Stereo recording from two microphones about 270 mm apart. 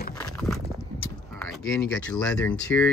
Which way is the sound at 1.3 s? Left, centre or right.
Centre.